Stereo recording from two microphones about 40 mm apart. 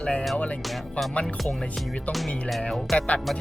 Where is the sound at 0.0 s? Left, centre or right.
Left.